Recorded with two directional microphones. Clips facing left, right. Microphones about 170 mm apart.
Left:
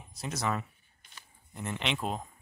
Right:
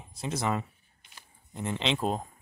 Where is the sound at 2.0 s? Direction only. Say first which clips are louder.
Right 5 dB; 40° right (ahead or behind).